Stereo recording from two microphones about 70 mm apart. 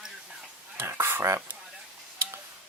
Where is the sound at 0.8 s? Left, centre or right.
Right.